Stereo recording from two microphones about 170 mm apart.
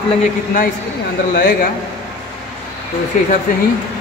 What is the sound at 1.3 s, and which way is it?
Speech, 60° left (ahead or behind).